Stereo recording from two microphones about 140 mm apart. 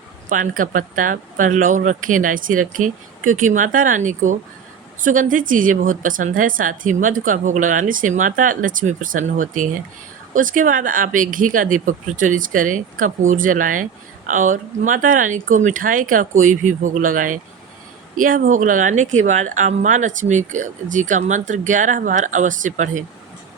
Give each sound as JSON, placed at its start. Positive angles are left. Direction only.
{"t": 0.3, "sound": "a woman's voice", "side_deg": -70}